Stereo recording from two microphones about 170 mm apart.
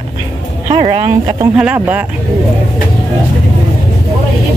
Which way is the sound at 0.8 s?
30° right (ahead or behind).